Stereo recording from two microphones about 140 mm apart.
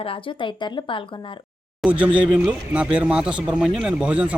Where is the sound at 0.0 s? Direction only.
35° left (ahead or behind).